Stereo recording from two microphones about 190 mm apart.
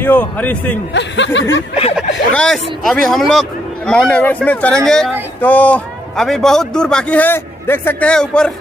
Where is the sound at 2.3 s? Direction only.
5° left (ahead or behind).